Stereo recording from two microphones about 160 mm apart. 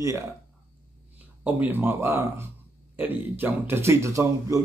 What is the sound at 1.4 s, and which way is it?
A man's voice, 10° right (ahead or behind).